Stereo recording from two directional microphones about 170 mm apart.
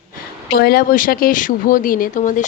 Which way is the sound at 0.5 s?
65° left (ahead or behind).